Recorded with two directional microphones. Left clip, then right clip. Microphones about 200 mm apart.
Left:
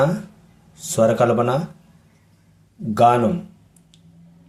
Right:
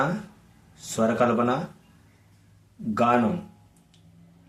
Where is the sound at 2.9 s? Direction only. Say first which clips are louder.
Left 8 dB; 45° left (ahead or behind).